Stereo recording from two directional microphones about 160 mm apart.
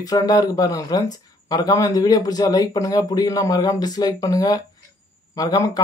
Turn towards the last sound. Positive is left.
turn(degrees=20)  # may be behind; listen again after turning